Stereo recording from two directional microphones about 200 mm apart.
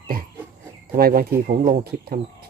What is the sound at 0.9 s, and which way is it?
Speech, 50° right (ahead or behind).